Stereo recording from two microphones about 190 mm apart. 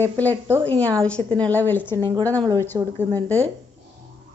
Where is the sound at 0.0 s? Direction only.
10° left (ahead or behind).